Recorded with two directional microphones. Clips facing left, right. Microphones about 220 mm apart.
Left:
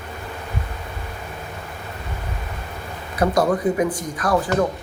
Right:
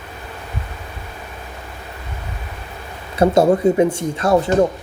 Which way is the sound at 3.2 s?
25° right (ahead or behind).